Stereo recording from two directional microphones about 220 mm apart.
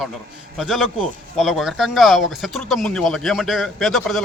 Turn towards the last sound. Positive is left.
turn(degrees=0)  # may be behind; listen again after turning